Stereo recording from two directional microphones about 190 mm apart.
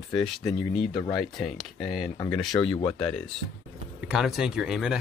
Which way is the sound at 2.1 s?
20° left (ahead or behind).